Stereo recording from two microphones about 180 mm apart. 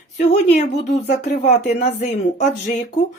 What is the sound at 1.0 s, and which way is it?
Speech, 60° left (ahead or behind).